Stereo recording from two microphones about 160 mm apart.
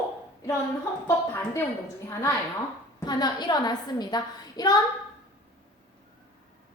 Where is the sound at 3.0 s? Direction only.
25° left (ahead or behind).